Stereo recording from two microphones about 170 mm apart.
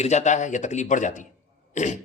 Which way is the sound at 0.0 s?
40° left (ahead or behind).